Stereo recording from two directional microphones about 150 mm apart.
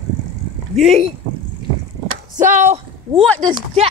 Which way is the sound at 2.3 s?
55° right (ahead or behind).